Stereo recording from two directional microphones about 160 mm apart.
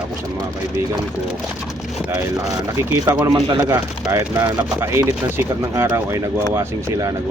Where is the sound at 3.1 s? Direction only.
20° right (ahead or behind).